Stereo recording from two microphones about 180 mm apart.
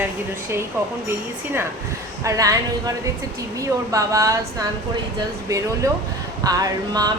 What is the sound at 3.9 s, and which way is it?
Speech, 20° right (ahead or behind).